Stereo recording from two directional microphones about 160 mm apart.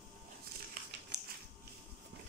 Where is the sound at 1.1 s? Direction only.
90° right.